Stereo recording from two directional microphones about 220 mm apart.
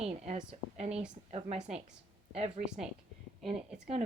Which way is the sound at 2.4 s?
30° right (ahead or behind).